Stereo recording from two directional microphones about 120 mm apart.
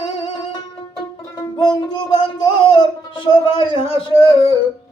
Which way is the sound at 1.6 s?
40° left (ahead or behind).